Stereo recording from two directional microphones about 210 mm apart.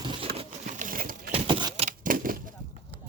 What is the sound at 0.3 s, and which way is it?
Pigeon, 35° right (ahead or behind).